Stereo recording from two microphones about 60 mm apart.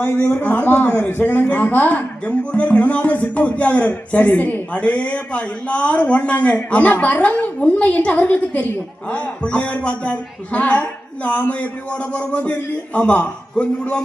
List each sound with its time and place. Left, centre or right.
0.4 s a man's voice: left